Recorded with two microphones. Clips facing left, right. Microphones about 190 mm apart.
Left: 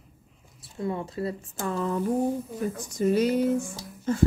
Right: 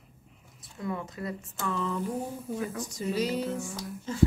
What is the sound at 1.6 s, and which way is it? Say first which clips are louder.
Speech: left 4 dB; 45° left (ahead or behind).